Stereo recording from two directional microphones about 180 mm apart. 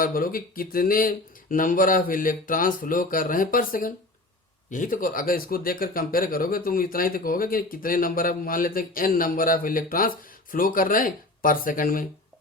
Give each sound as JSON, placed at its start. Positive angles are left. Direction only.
{"t": 0.0, "sound": "speech", "side_deg": 55}